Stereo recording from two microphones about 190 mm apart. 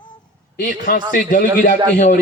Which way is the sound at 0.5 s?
45° left (ahead or behind).